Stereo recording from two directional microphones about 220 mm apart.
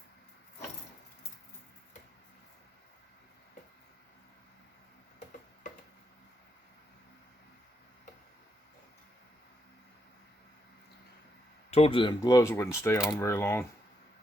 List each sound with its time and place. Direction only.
11.7 s speech: 25° left (ahead or behind)